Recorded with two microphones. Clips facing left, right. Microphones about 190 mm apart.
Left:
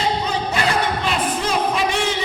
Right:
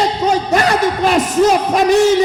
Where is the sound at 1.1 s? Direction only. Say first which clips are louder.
Right 9 dB; 45° right (ahead or behind).